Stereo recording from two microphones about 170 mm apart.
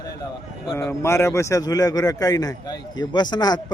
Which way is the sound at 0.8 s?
15° left (ahead or behind).